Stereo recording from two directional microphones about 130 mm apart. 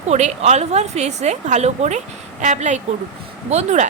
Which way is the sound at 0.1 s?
60° right (ahead or behind).